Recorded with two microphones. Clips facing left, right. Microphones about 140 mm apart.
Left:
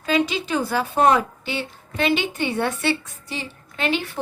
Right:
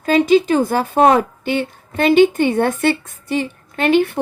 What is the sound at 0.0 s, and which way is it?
A woman's voice, 45° right (ahead or behind).